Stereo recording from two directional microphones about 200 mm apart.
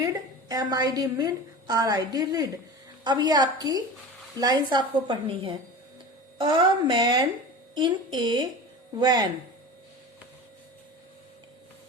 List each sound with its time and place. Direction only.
0.0 s a woman's voice: 15° right (ahead or behind)